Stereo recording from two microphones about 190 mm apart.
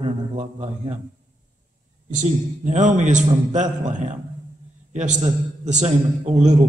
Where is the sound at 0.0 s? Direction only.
40° right (ahead or behind).